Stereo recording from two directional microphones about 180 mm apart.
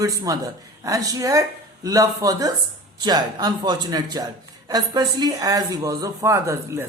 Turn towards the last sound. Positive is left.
turn(degrees=-15)  # may be behind; listen again after turning